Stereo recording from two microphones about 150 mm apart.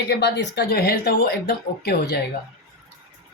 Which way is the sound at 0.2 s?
90° left.